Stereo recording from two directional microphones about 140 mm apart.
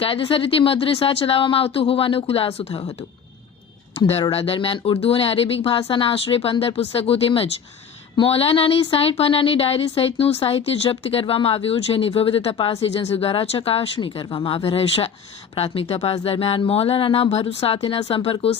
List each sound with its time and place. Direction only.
0.0 s speech: 40° left (ahead or behind)
4.0 s speech: 45° left (ahead or behind)